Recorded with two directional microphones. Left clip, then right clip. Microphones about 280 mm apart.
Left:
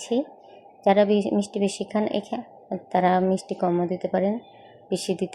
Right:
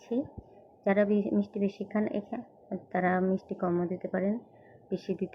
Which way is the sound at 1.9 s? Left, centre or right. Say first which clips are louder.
Left 7 dB; left.